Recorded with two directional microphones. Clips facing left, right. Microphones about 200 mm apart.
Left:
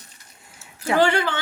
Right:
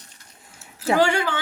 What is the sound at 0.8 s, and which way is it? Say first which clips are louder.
Speech: even; 10° right (ahead or behind).